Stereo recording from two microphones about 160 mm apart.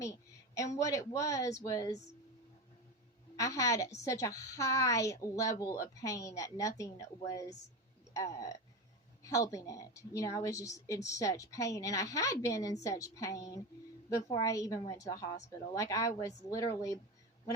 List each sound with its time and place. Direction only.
0.0 s a woman's voice: 20° left (ahead or behind)
3.3 s a woman's voice: 20° left (ahead or behind)